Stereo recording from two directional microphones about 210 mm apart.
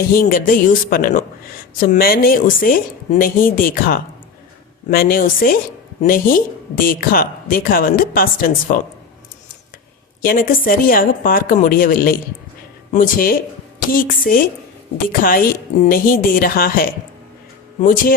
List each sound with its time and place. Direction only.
0.1 s speech: 45° left (ahead or behind)
10.2 s speech: 45° left (ahead or behind)